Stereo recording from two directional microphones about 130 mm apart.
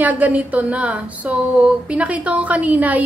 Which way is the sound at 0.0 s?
10° right (ahead or behind).